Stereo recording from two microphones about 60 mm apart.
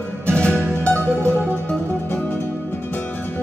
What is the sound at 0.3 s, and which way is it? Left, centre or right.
Music, centre.